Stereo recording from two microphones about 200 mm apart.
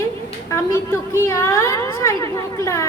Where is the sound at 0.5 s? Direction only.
15° left (ahead or behind).